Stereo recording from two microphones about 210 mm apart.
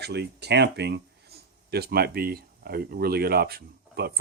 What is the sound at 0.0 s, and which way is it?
Speech, 50° right (ahead or behind).